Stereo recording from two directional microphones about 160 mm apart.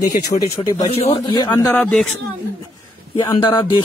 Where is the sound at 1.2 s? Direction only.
30° left (ahead or behind).